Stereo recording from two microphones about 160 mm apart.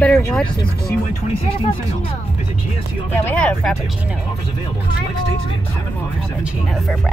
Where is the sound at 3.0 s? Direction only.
10° left (ahead or behind).